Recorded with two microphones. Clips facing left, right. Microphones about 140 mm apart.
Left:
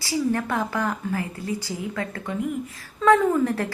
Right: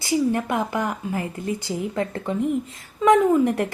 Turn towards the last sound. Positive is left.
turn(degrees=-20)  # may be behind; listen again after turning